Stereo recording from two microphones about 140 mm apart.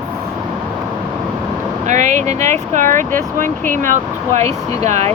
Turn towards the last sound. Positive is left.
turn(degrees=-50)  # may be behind; listen again after turning